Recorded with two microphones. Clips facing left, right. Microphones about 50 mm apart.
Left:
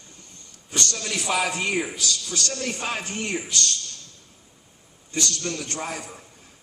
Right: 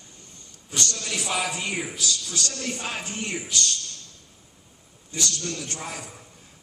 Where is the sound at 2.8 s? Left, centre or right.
Left.